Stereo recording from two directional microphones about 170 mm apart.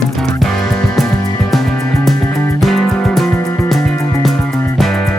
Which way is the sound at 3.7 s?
Centre (ahead or behind).